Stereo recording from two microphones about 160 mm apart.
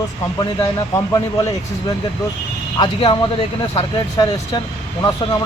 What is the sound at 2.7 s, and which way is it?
A man's voice, 30° left (ahead or behind).